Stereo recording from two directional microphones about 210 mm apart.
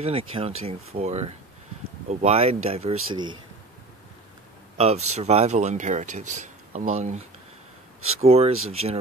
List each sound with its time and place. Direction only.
0.0 s speech: 25° right (ahead or behind)
4.7 s speech: 30° right (ahead or behind)